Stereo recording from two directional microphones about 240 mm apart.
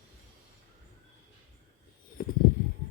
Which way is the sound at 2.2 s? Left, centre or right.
Left.